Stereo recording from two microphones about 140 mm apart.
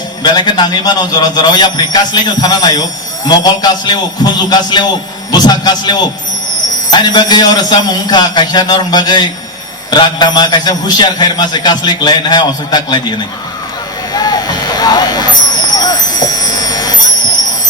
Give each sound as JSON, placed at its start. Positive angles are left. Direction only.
{"t": 0.2, "sound": "a man's voice", "side_deg": 30}
{"t": 14.1, "sound": "vehicle", "side_deg": 30}